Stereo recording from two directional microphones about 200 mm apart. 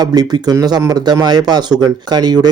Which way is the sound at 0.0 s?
20° right (ahead or behind).